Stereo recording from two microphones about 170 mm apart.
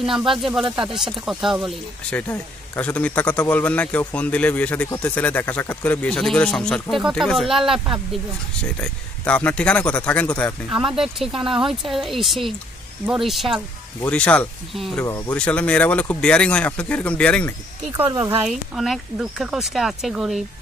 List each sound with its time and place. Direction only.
0.0 s speech: centre (ahead or behind)
8.8 s speech: 5° left (ahead or behind)
10.9 s speech: 5° right (ahead or behind)
11.3 s speech: 30° right (ahead or behind)
11.6 s speech: centre (ahead or behind)
18.1 s speech: 30° right (ahead or behind)
18.5 s speech: centre (ahead or behind)